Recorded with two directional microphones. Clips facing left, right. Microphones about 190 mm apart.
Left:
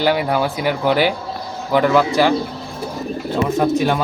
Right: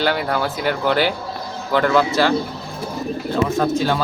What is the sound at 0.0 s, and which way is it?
Speech, 10° left (ahead or behind).